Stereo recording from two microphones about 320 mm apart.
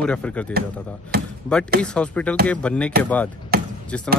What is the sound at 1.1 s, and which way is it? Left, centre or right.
Speech, right.